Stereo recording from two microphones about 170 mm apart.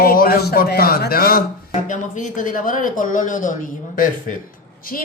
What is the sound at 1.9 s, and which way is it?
Speech, 50° left (ahead or behind).